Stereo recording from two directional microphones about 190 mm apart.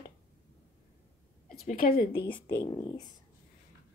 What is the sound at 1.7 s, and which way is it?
Speech, 50° left (ahead or behind).